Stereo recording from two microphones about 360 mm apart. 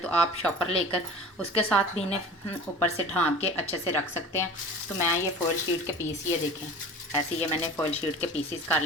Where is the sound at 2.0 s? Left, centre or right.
Centre.